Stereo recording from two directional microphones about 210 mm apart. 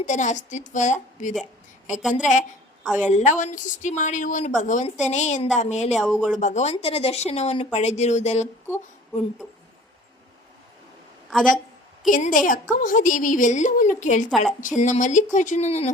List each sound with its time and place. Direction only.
0.0 s a woman's voice: 35° left (ahead or behind)
2.0 s speech: 5° right (ahead or behind)
3.1 s a woman's voice: 35° left (ahead or behind)
5.9 s speech: 5° right (ahead or behind)
6.4 s a woman's voice: 35° left (ahead or behind)
11.3 s speech: centre (ahead or behind)
12.1 s a woman's voice: 40° left (ahead or behind)
14.3 s speech: centre (ahead or behind)
14.6 s a woman's voice: 35° left (ahead or behind)